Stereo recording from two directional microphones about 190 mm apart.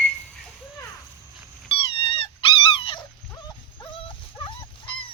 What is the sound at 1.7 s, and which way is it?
Dog, 25° left (ahead or behind).